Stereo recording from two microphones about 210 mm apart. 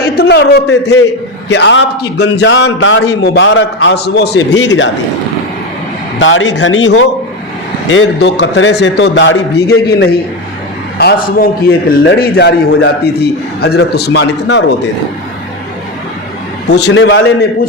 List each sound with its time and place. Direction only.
0.0 s a man's voice: 50° left (ahead or behind)
6.1 s a man's voice: 65° left (ahead or behind)
16.6 s a man's voice: 55° left (ahead or behind)